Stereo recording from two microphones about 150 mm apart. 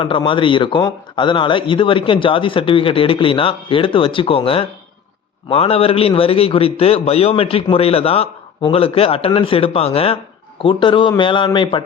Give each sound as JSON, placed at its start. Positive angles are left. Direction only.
{"t": 0.0, "sound": "a man's voice", "side_deg": 35}